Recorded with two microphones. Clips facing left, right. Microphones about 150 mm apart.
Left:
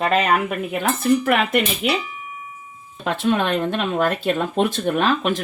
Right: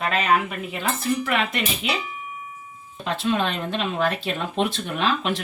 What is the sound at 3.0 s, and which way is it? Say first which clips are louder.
Speech: left 3 dB; 55° left (ahead or behind).